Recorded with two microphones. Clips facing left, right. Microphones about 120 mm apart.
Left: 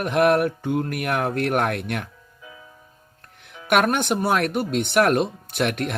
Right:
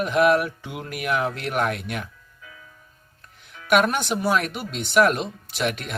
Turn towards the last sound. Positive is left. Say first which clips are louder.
# left 3 dB
turn(degrees=55)  # may be behind; listen again after turning